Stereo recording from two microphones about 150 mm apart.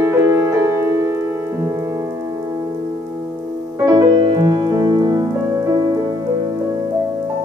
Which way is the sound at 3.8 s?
25° right (ahead or behind).